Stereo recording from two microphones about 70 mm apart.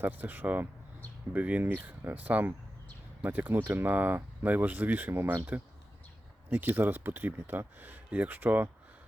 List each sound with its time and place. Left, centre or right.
0.0 s speech: right
6.5 s speech: right